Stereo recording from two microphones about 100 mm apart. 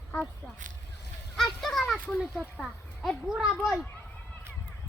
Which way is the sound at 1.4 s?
5° left (ahead or behind).